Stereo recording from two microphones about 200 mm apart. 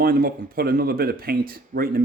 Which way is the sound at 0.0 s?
50° right (ahead or behind).